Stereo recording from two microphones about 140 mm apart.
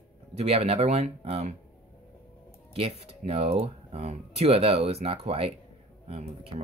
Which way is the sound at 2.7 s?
45° right (ahead or behind).